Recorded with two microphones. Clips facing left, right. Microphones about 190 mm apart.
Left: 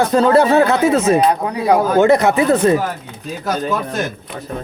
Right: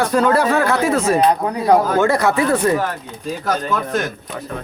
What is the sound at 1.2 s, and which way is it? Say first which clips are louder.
Speech: even; 10° left (ahead or behind).